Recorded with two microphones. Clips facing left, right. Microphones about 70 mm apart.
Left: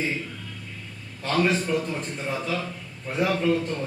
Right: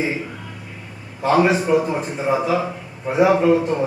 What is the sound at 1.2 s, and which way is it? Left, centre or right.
A man's voice, centre.